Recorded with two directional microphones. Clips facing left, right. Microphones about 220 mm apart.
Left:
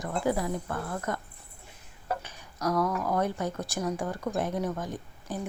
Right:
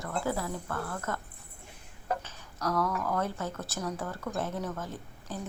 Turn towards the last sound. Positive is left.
turn(degrees=15)  # may be behind; listen again after turning